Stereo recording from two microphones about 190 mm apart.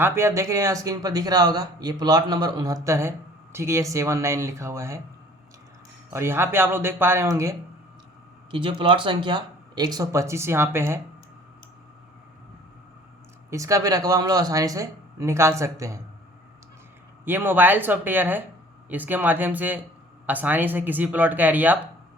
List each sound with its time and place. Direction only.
0.0 s speech: 15° right (ahead or behind)
6.1 s speech: 10° right (ahead or behind)
8.4 s speech: 25° right (ahead or behind)
13.5 s speech: 15° right (ahead or behind)
17.2 s speech: 10° right (ahead or behind)